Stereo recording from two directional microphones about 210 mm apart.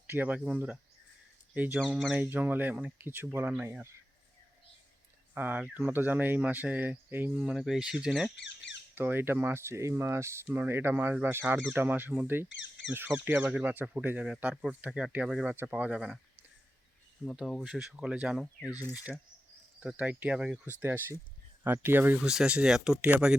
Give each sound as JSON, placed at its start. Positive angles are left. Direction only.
{"t": 0.1, "sound": "speech", "side_deg": -10}
{"t": 5.3, "sound": "speech", "side_deg": -10}
{"t": 8.4, "sound": "speech", "side_deg": 55}
{"t": 9.0, "sound": "speech", "side_deg": -10}
{"t": 12.5, "sound": "speech", "side_deg": 60}
{"t": 12.9, "sound": "speech", "side_deg": -10}
{"t": 17.2, "sound": "speech", "side_deg": 0}
{"t": 18.6, "sound": "speech", "side_deg": 15}
{"t": 19.8, "sound": "speech", "side_deg": -5}